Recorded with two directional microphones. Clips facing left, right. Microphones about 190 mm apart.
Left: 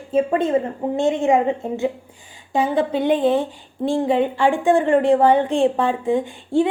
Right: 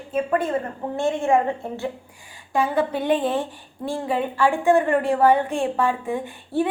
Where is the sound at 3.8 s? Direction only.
25° left (ahead or behind).